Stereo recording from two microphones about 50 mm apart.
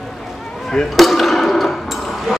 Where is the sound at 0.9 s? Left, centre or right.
Centre.